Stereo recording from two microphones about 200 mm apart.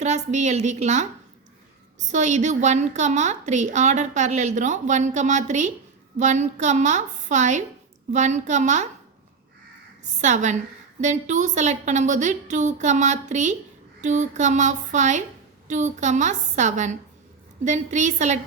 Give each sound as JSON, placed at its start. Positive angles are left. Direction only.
{"t": 0.0, "sound": "a woman's voice", "side_deg": -35}
{"t": 10.2, "sound": "a woman's voice", "side_deg": -35}